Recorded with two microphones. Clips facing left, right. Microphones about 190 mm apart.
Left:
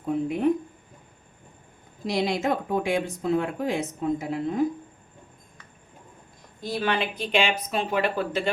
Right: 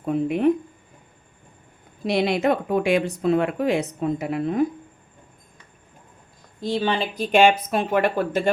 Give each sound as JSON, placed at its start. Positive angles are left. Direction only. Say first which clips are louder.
{"t": 0.0, "sound": "speech", "louder": "right 4 dB", "side_deg": -70}
{"t": 2.0, "sound": "speech", "louder": "right 4 dB", "side_deg": -65}
{"t": 6.6, "sound": "speech", "louder": "right 3 dB", "side_deg": -25}